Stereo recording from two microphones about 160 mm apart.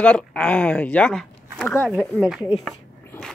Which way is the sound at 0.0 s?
5° left (ahead or behind).